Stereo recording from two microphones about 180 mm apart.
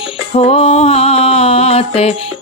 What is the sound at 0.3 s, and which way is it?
Music, 35° left (ahead or behind).